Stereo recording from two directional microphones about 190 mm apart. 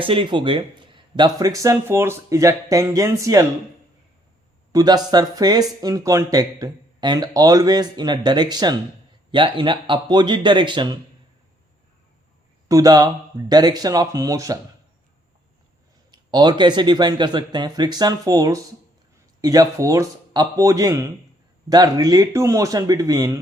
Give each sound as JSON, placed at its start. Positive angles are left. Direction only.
{"t": 0.0, "sound": "speech", "side_deg": -25}
{"t": 4.7, "sound": "speech", "side_deg": -20}
{"t": 12.6, "sound": "speech", "side_deg": -20}
{"t": 16.1, "sound": "speech", "side_deg": -20}